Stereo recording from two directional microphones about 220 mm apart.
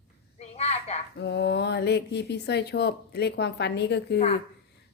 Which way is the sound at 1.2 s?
50° left (ahead or behind).